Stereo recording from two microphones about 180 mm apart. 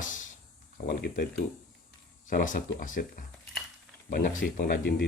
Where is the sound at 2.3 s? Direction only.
50° left (ahead or behind).